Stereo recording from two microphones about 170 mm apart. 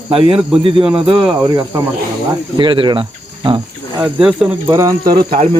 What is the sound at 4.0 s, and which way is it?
Cricket, 10° right (ahead or behind).